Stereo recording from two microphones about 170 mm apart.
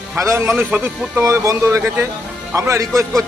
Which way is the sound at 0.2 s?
15° right (ahead or behind).